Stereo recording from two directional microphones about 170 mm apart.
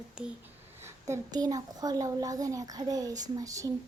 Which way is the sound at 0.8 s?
15° right (ahead or behind).